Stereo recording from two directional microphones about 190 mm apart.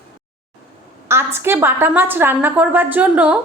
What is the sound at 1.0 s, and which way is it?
A woman's voice, 15° right (ahead or behind).